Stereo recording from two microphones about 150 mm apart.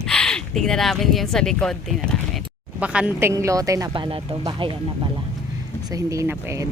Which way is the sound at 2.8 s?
10° right (ahead or behind).